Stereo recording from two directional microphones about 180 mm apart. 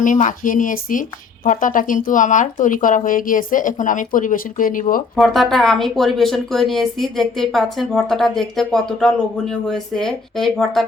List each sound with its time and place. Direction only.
0.0 s speech: 45° left (ahead or behind)
5.1 s speech: centre (ahead or behind)